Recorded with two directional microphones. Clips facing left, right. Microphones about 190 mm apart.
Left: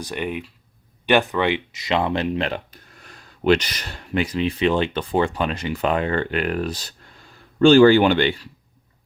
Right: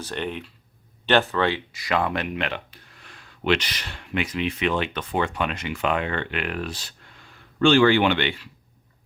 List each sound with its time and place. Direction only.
0.0 s speech: 10° left (ahead or behind); by 8.4 s 40° left (ahead or behind)